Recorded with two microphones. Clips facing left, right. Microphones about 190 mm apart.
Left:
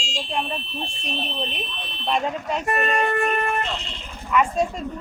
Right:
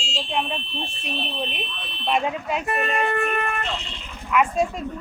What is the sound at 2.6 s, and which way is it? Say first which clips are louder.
Speech: left 4 dB; 45° left (ahead or behind).